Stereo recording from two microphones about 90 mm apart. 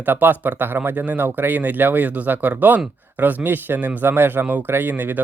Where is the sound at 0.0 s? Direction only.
20° right (ahead or behind).